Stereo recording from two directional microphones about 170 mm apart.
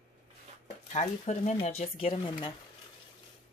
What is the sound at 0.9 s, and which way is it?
Speech, 45° left (ahead or behind).